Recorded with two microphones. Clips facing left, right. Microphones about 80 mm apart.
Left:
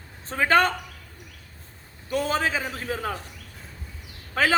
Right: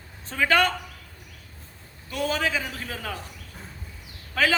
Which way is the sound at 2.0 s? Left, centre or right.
Left.